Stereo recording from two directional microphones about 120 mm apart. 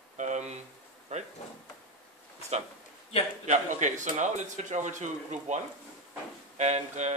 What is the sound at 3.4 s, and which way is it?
A man's voice, 85° right.